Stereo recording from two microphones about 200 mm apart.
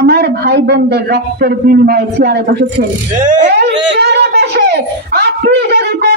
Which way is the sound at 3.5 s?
55° right (ahead or behind).